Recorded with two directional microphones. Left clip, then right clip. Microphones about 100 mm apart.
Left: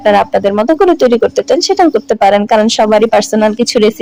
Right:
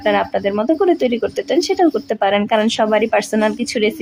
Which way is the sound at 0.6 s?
45° left (ahead or behind).